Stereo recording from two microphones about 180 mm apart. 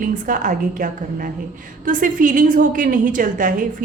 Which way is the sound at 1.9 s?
45° right (ahead or behind).